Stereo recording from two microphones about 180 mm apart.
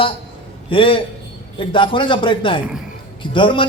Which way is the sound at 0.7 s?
30° left (ahead or behind).